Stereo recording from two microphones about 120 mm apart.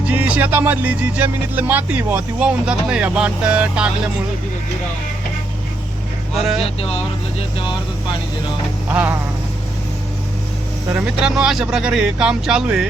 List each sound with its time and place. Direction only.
0.1 s music: 15° right (ahead or behind)
6.3 s speech: 5° right (ahead or behind)
6.6 s speech: 55° left (ahead or behind)
8.9 s music: 15° right (ahead or behind)
10.9 s music: 10° right (ahead or behind)